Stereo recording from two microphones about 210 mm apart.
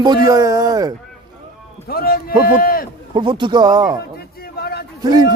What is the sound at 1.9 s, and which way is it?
Speech, 45° left (ahead or behind).